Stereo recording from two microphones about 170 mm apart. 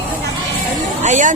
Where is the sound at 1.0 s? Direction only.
45° right (ahead or behind).